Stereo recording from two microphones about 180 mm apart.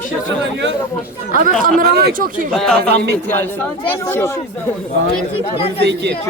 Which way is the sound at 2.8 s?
65° right (ahead or behind).